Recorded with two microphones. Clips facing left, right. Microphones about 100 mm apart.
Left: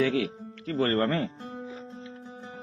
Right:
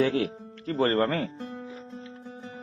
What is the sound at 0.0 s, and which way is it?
A man's voice, 35° right (ahead or behind).